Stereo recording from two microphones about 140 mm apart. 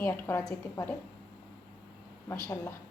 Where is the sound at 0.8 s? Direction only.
30° left (ahead or behind).